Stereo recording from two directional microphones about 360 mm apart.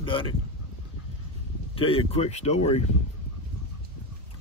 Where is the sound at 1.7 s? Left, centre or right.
Centre.